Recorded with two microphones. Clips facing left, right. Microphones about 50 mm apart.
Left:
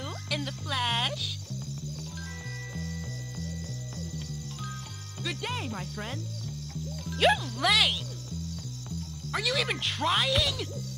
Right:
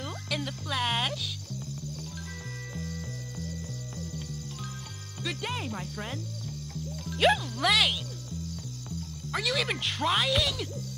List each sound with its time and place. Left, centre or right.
0.0 s music: centre
5.2 s music: centre
7.2 s music: centre
9.3 s speech: centre